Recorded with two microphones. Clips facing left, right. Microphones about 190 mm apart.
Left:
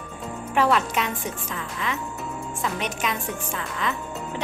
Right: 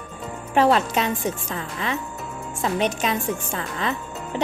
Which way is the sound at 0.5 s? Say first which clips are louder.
Right 3 dB; 30° right (ahead or behind).